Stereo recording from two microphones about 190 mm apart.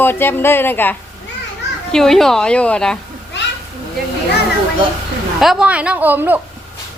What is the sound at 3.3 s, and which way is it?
Children playing, 65° left (ahead or behind).